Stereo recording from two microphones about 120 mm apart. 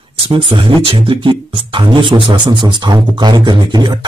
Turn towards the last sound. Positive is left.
turn(degrees=-35)  # may be behind; listen again after turning